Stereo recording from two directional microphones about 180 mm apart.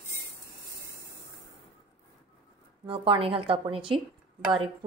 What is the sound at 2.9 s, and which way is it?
A woman's voice, 30° right (ahead or behind).